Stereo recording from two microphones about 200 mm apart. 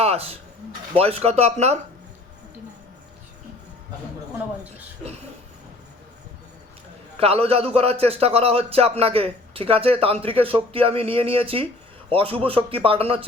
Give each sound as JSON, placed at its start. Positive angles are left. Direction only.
{"t": 0.0, "sound": "a sound", "side_deg": -30}
{"t": 0.9, "sound": "speech", "side_deg": -30}
{"t": 7.2, "sound": "a man's voice", "side_deg": -30}